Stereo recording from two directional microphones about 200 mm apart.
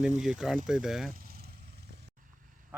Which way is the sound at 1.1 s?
45° right (ahead or behind).